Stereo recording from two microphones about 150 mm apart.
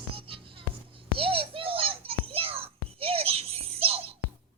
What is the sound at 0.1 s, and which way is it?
Music, 35° right (ahead or behind).